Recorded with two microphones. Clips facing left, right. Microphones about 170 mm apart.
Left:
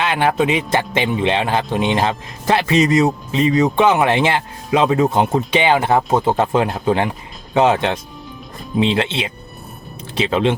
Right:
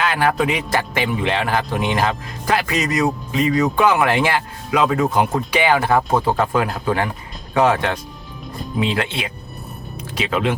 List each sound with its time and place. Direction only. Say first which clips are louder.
0.0 s speech: left 2 dB; 25° left (ahead or behind)